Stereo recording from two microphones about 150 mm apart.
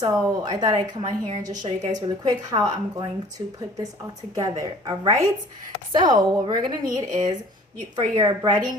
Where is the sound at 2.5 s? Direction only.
30° right (ahead or behind).